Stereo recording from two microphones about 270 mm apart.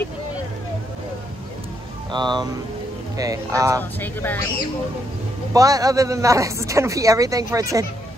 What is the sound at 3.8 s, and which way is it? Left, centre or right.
Speech, centre.